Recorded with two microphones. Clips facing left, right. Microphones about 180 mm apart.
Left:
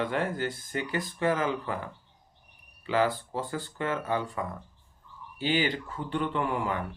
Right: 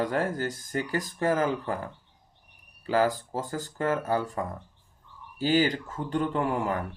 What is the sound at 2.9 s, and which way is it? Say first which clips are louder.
Speech: right 2 dB; 40° right (ahead or behind).